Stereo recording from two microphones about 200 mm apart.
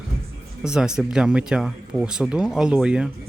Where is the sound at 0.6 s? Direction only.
5° right (ahead or behind).